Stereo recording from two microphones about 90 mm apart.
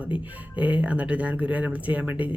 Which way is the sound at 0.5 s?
15° right (ahead or behind).